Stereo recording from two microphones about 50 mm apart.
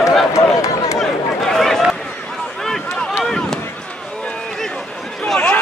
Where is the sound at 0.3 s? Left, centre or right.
Left.